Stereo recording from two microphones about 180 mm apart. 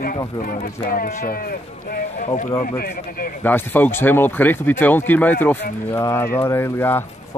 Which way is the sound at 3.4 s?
10° left (ahead or behind).